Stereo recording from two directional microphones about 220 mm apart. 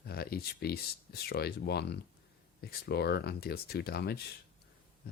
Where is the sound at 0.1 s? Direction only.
45° left (ahead or behind).